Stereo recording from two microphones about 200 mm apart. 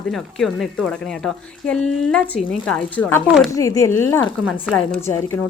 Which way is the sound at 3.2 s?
5° right (ahead or behind).